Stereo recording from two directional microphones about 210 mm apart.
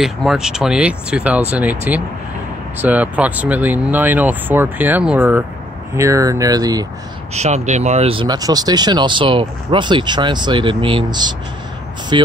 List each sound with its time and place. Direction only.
0.0 s speech: centre (ahead or behind); by 6.9 s 15° right (ahead or behind)
7.3 s speech: 30° right (ahead or behind)